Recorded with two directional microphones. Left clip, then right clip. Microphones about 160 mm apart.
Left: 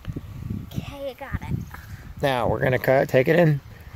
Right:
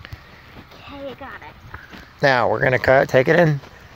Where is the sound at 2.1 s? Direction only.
10° left (ahead or behind); by 3.5 s 25° left (ahead or behind).